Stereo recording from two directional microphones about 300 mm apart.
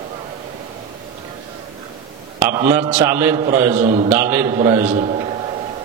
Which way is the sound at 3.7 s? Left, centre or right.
Right.